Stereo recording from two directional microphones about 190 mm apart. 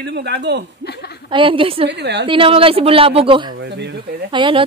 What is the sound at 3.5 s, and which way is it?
Speech, 65° right (ahead or behind).